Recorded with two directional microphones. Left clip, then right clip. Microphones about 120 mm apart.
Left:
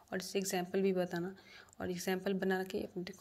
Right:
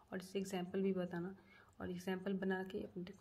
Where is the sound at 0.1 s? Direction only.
25° left (ahead or behind).